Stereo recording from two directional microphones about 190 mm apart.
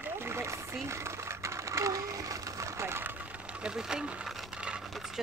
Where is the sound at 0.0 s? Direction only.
10° right (ahead or behind).